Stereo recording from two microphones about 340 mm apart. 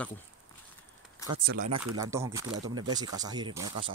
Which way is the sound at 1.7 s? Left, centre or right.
Right.